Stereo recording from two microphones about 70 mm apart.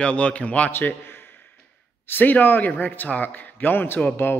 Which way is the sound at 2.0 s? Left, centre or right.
Left.